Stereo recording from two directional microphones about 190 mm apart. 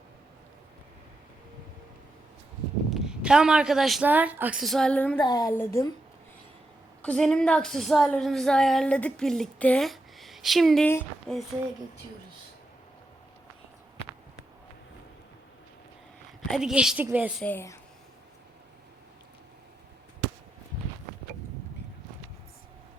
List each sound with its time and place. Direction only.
2.9 s a woman's voice: 5° right (ahead or behind)
5.2 s a woman's voice: 20° left (ahead or behind)
7.0 s a woman's voice: 5° left (ahead or behind)
16.5 s a woman's voice: 5° right (ahead or behind)
17.4 s speech: 10° left (ahead or behind)